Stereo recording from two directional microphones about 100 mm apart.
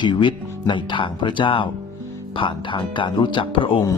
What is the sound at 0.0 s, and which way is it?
Speech, 55° left (ahead or behind).